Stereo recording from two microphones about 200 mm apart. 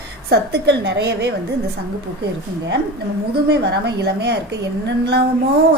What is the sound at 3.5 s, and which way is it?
Speech, 55° right (ahead or behind).